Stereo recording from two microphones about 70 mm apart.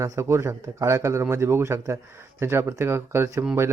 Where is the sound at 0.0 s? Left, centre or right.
Right.